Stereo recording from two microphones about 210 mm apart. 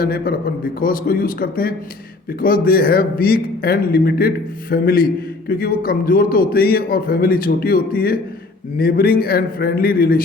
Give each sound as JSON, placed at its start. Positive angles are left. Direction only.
{"t": 0.0, "sound": "a man's voice", "side_deg": 45}